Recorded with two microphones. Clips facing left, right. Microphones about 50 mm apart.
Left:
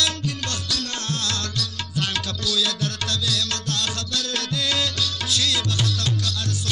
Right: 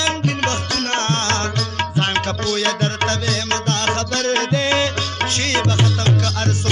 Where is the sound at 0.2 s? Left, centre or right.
Right.